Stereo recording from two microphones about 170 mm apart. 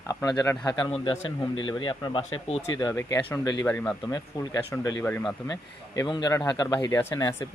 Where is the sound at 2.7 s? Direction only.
25° left (ahead or behind).